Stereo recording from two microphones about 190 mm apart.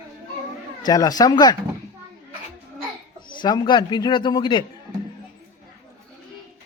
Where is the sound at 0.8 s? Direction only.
20° left (ahead or behind).